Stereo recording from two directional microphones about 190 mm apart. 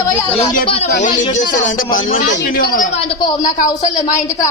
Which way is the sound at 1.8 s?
45° left (ahead or behind).